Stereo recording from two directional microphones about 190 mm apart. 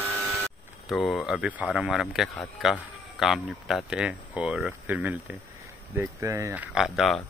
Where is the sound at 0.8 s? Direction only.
Centre (ahead or behind).